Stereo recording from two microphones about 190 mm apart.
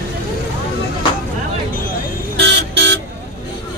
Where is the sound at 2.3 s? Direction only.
65° right (ahead or behind).